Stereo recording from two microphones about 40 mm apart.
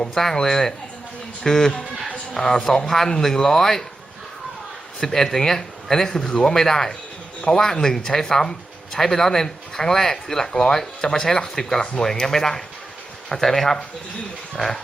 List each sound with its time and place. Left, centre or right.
0.1 s a man's voice: centre
4.9 s speech: centre